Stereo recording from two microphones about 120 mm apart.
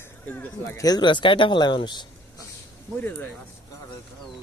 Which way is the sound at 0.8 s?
35° left (ahead or behind).